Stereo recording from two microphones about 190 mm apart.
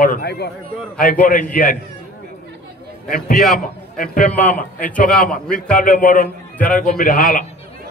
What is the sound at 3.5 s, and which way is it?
Speech, 45° left (ahead or behind).